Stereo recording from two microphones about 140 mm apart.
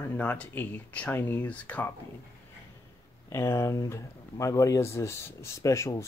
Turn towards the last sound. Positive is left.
turn(degrees=20)  # may be behind; listen again after turning